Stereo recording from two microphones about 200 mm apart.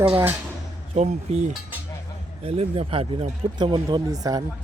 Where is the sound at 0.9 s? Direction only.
35° right (ahead or behind).